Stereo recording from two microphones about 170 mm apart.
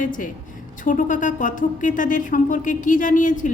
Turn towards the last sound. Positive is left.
turn(degrees=50)  # may be behind; listen again after turning